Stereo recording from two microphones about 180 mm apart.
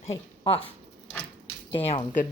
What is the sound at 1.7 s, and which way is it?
Speech, 30° left (ahead or behind).